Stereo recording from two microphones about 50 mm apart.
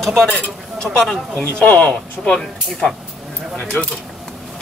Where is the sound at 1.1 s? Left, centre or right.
Left.